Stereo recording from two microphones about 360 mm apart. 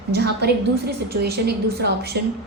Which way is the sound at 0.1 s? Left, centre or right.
Right.